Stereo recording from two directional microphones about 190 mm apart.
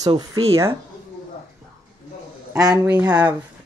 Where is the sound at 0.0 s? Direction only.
20° right (ahead or behind).